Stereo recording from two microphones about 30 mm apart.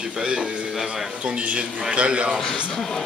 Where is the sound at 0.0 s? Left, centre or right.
Right.